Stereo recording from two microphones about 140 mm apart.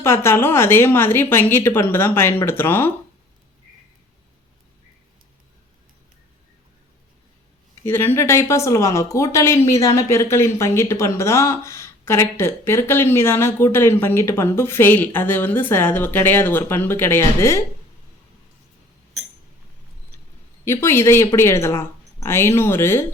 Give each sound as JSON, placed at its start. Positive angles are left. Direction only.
{"t": 0.0, "sound": "a woman's voice", "side_deg": 20}
{"t": 7.9, "sound": "a woman's voice", "side_deg": 15}
{"t": 20.7, "sound": "a woman's voice", "side_deg": 20}